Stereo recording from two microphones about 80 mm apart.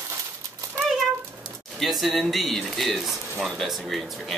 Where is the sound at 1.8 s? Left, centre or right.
Centre.